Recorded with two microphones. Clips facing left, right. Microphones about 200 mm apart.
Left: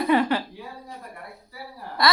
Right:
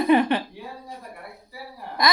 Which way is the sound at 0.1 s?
20° right (ahead or behind).